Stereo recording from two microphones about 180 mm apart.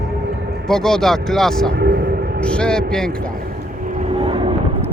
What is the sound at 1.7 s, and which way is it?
Vehicle, 65° right (ahead or behind).